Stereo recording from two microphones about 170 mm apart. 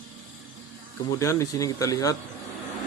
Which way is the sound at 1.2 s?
20° left (ahead or behind).